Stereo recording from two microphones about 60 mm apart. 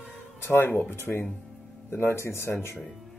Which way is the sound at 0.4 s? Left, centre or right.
Left.